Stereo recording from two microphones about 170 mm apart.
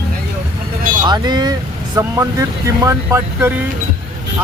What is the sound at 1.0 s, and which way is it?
Speech, 25° right (ahead or behind).